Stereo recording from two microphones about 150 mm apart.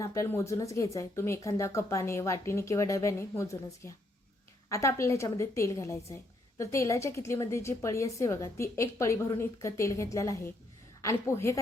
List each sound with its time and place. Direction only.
0.0 s a woman's voice: 20° left (ahead or behind)